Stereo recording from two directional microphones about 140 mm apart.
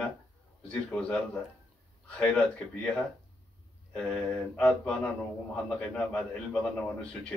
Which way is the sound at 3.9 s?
5° left (ahead or behind).